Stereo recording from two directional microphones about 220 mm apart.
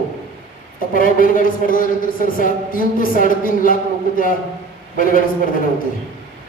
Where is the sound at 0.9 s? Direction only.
40° left (ahead or behind).